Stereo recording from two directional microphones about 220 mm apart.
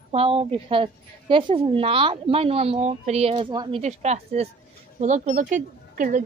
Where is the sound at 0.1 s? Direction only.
25° right (ahead or behind).